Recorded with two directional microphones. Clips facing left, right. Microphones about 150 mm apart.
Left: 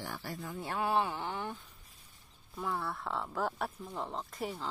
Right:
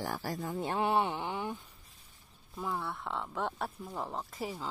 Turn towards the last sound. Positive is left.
turn(degrees=0)  # may be behind; listen again after turning